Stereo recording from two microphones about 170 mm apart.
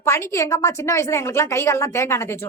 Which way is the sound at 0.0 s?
15° left (ahead or behind).